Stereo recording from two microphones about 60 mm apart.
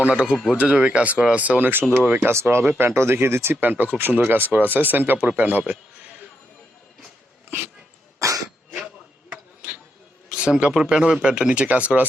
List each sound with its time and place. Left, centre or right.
0.0 s speech: centre
2.3 s speech: right
8.2 s cough: right
9.3 s a sound: right
10.2 s speech: centre